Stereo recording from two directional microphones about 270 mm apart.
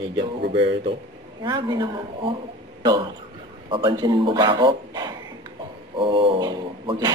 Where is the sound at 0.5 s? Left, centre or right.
Centre.